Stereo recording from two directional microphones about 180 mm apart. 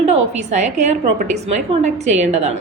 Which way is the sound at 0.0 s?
40° right (ahead or behind).